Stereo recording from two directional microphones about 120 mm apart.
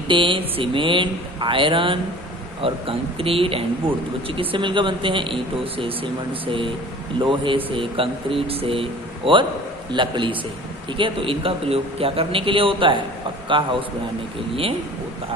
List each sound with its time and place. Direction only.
0.1 s a man's voice: 45° right (ahead or behind)